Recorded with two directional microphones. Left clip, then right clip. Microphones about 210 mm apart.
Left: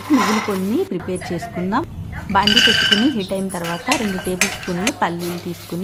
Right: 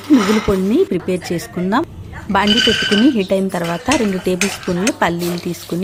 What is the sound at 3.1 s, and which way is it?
Speech, 35° right (ahead or behind).